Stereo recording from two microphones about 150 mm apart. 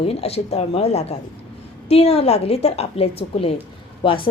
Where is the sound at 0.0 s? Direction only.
40° left (ahead or behind).